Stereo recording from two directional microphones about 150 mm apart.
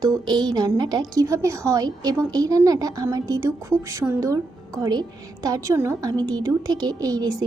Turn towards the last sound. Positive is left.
turn(degrees=-25)  # may be behind; listen again after turning